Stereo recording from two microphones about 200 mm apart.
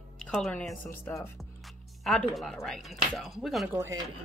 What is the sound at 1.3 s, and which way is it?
Speech, centre (ahead or behind).